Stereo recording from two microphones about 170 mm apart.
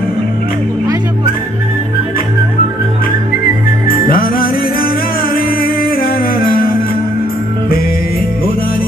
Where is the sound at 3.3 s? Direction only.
55° left (ahead or behind).